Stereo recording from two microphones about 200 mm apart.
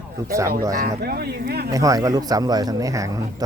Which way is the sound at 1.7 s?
15° right (ahead or behind).